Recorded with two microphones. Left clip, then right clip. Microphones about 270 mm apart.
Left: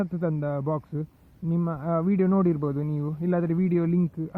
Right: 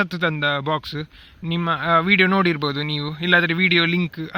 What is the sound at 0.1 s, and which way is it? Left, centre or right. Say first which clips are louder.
Speech: right 8 dB; right.